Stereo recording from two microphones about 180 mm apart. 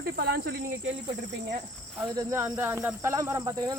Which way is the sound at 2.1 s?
20° right (ahead or behind).